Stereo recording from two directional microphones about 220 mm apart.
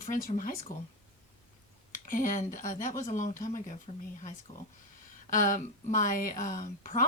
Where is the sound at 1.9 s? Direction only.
35° left (ahead or behind).